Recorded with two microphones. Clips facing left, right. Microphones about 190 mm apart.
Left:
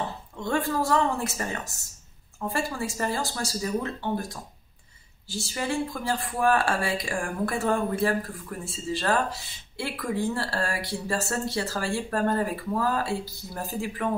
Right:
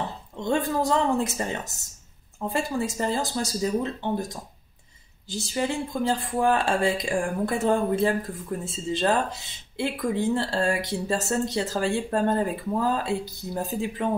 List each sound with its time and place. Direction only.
0.4 s speech: 20° right (ahead or behind)